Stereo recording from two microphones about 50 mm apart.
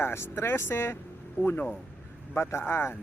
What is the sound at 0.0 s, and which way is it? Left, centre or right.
Speech, left.